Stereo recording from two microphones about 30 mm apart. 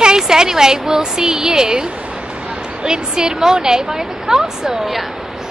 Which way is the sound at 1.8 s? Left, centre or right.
Right.